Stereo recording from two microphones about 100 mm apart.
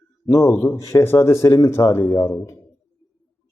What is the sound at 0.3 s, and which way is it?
Speech, 30° left (ahead or behind).